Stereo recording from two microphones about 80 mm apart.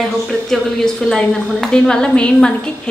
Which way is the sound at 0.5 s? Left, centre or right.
Centre.